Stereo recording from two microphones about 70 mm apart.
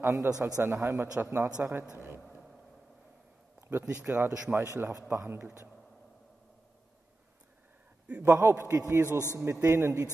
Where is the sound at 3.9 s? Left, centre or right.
Centre.